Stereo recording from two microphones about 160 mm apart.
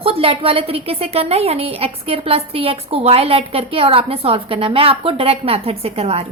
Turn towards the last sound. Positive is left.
turn(degrees=-40)  # may be behind; listen again after turning